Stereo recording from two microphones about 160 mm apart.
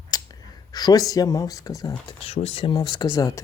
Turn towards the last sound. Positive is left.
turn(degrees=20)  # may be behind; listen again after turning